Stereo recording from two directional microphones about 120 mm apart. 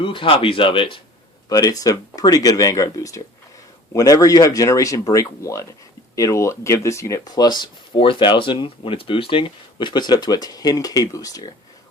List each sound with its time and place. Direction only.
0.0 s speech: 45° left (ahead or behind)
1.5 s speech: 30° left (ahead or behind)